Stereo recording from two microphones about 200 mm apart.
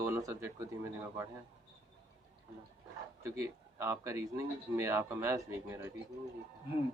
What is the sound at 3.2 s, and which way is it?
Speech, 15° right (ahead or behind).